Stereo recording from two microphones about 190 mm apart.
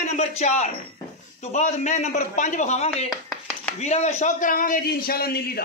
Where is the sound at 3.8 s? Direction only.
35° left (ahead or behind); by 5.6 s 55° left (ahead or behind).